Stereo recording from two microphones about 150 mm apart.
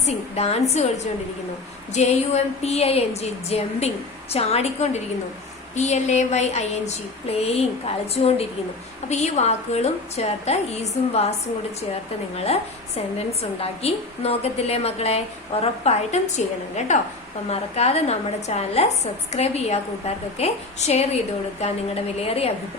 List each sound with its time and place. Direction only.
0.0 s a woman's voice: 45° left (ahead or behind)
1.9 s a woman's voice: 45° left (ahead or behind)
13.1 s a woman's voice: 40° left (ahead or behind)